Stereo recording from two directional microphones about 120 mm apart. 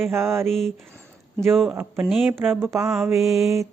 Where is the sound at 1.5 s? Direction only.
5° right (ahead or behind).